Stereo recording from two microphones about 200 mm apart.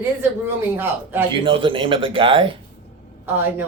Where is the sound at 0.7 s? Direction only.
10° right (ahead or behind).